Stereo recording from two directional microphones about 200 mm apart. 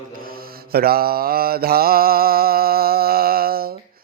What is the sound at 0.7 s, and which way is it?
Mantra, 50° right (ahead or behind).